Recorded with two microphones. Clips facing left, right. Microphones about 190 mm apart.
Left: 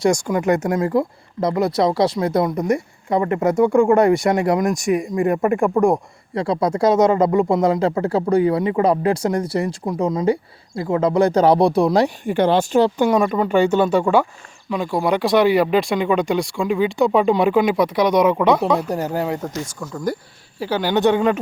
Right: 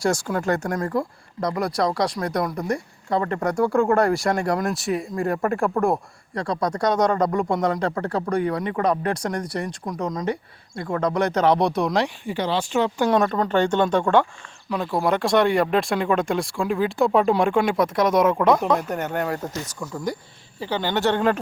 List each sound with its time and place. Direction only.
0.1 s speech: 15° left (ahead or behind); by 12.9 s 40° left (ahead or behind)
13.1 s speech: 5° left (ahead or behind)
18.9 s speech: 35° left (ahead or behind)
19.6 s speech: centre (ahead or behind)